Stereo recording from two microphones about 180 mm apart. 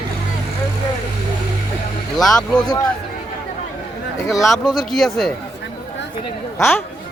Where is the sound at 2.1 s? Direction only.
Centre (ahead or behind).